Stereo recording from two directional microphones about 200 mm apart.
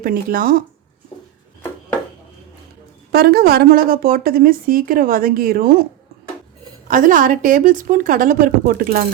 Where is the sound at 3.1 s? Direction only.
50° right (ahead or behind).